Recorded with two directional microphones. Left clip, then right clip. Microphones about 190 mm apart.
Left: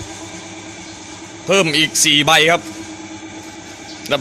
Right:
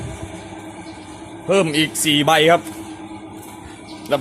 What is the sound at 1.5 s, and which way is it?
A man's voice, centre (ahead or behind).